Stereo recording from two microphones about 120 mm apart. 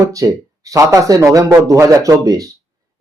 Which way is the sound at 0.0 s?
30° right (ahead or behind).